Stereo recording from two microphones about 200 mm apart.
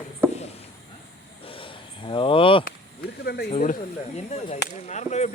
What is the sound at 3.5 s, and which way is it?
Speech, 35° left (ahead or behind).